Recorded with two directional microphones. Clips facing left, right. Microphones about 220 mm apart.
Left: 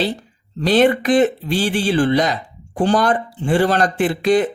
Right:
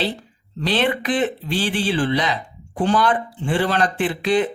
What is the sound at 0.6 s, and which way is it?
Speech, 45° left (ahead or behind).